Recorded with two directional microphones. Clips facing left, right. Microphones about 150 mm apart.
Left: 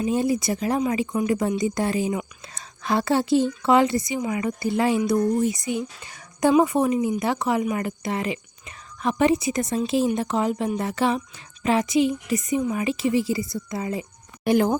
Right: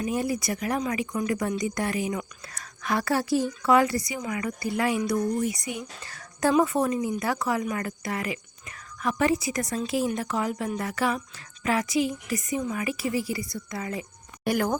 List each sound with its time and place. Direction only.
0.0 s speech: 25° left (ahead or behind)